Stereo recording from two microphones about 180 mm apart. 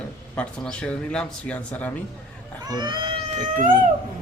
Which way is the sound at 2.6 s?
25° right (ahead or behind).